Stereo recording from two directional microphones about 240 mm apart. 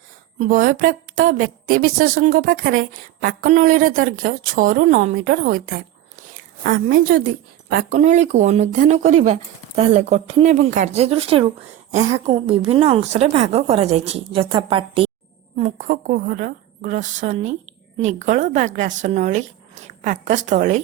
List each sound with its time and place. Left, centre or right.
0.3 s a woman's voice: right